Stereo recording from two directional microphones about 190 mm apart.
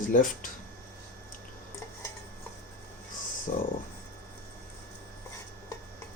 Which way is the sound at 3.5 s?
45° left (ahead or behind).